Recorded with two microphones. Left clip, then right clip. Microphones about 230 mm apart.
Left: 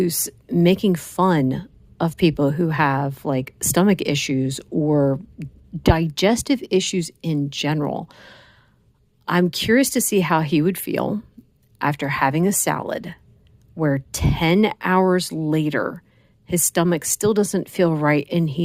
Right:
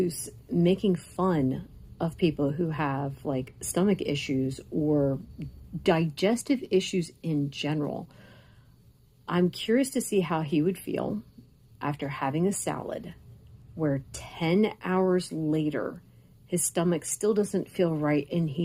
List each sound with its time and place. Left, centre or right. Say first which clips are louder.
0.0 s speech: left 7 dB; left